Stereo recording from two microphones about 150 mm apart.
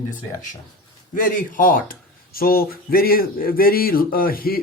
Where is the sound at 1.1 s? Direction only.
65° left (ahead or behind).